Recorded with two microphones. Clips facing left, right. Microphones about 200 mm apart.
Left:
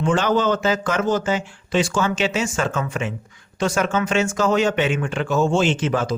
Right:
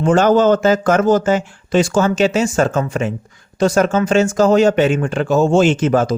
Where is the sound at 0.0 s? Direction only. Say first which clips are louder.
Right 7 dB; 45° right (ahead or behind).